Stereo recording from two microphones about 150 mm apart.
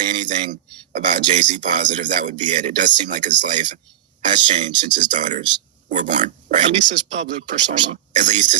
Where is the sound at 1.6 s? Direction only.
60° right (ahead or behind).